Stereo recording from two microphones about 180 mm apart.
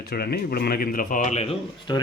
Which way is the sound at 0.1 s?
60° left (ahead or behind).